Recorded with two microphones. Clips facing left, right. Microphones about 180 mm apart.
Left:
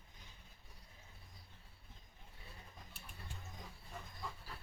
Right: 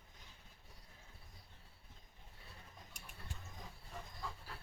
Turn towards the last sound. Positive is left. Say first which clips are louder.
# even
turn(degrees=-15)  # may be behind; listen again after turning